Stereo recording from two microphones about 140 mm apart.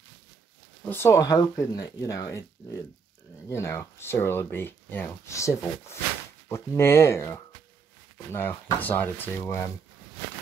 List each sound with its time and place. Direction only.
0.8 s speech: 15° left (ahead or behind)